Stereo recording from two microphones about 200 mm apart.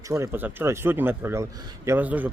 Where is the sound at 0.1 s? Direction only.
10° right (ahead or behind).